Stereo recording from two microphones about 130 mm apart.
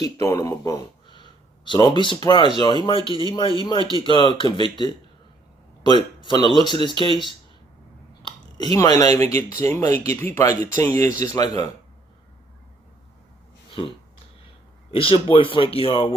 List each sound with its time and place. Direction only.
0.0 s speech: 25° left (ahead or behind)
8.7 s speech: 25° left (ahead or behind)
14.8 s speech: 45° left (ahead or behind)